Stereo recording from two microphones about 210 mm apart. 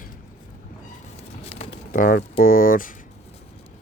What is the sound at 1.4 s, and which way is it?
Pigeon, 30° left (ahead or behind).